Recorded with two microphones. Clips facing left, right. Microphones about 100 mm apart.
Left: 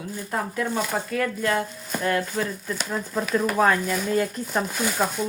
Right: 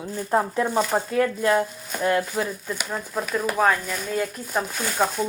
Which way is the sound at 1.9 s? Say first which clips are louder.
Right 2 dB; centre (ahead or behind).